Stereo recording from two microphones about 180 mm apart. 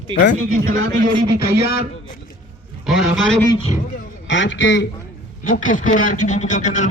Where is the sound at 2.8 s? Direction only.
Centre (ahead or behind).